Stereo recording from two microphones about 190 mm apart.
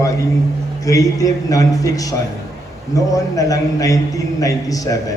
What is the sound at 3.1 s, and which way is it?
A man's voice, 20° left (ahead or behind).